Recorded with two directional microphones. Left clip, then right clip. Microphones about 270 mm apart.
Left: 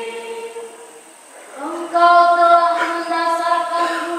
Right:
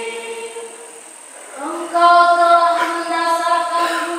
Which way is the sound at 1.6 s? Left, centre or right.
Centre.